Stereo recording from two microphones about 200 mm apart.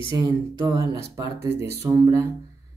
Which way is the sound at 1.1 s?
15° right (ahead or behind).